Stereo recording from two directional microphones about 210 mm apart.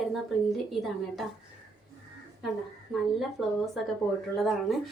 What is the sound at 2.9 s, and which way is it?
A woman's voice, centre (ahead or behind).